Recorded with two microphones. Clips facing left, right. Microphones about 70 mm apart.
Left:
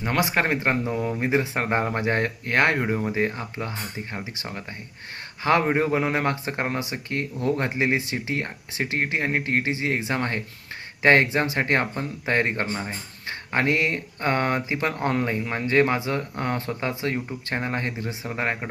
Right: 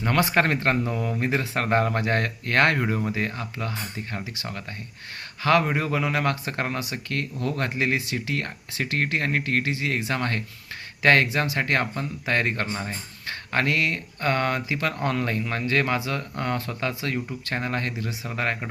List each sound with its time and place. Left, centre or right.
0.0 s speech: centre